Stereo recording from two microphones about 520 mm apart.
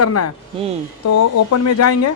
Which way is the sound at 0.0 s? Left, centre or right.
Left.